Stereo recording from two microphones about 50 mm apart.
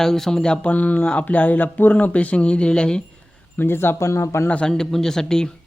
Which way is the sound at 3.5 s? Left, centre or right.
Left.